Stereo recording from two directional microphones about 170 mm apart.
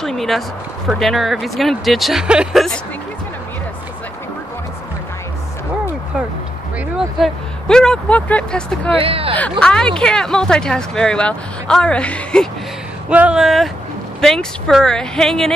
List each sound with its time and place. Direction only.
0.0 s a sound: centre (ahead or behind)
0.8 s speech: centre (ahead or behind)
7.2 s speech: 5° left (ahead or behind)
9.0 s speech: 35° right (ahead or behind)
9.4 s speech: 5° left (ahead or behind)
13.1 s speech: 5° right (ahead or behind)